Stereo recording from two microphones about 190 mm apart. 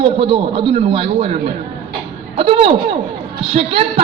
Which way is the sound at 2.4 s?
30° right (ahead or behind).